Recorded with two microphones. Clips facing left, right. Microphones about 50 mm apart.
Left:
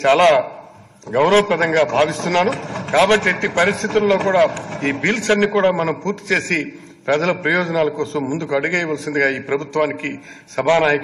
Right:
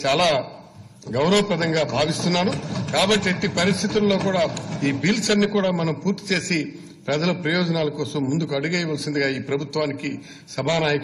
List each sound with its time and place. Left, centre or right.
0.0 s a man's voice: left
2.8 s a sound: left
3.1 s a man's voice: left
7.1 s a man's voice: left